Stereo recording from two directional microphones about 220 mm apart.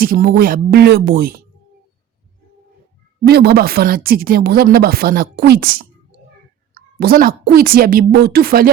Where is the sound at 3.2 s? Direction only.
45° right (ahead or behind).